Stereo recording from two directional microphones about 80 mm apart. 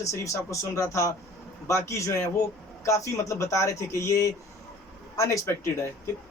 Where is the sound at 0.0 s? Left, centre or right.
Left.